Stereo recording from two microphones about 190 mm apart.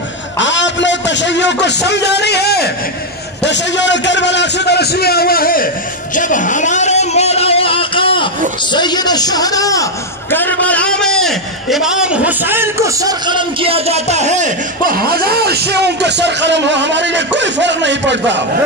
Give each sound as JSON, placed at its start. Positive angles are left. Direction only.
{"t": 0.4, "sound": "a man's voice", "side_deg": 75}
{"t": 3.4, "sound": "a man's voice", "side_deg": 70}
{"t": 6.1, "sound": "a sound", "side_deg": 45}
{"t": 8.7, "sound": "a man's voice", "side_deg": 20}
{"t": 14.9, "sound": "speech", "side_deg": -50}